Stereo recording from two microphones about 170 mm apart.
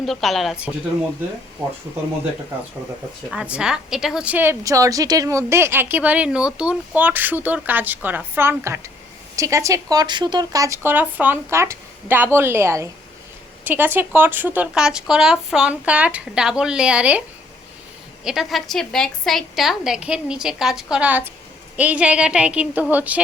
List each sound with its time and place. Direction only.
0.0 s a woman's voice: centre (ahead or behind)
3.2 s a woman's voice: 5° right (ahead or behind)
18.3 s a woman's voice: centre (ahead or behind)